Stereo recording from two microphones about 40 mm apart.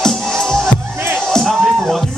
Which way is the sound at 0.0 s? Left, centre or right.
Centre.